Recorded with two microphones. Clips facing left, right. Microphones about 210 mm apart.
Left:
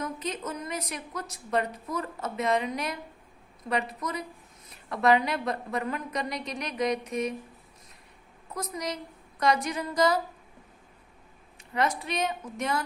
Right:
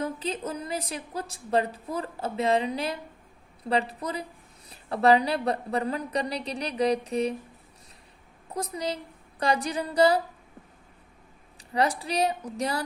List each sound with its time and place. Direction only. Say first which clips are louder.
0.0 s a woman's voice: right 3 dB; 30° right (ahead or behind)
8.5 s a woman's voice: right 3 dB; 30° right (ahead or behind)
11.7 s a woman's voice: right 2 dB; 35° right (ahead or behind)